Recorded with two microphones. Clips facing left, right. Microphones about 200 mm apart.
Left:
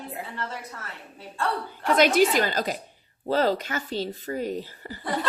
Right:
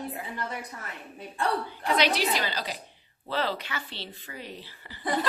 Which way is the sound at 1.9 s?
45° left (ahead or behind).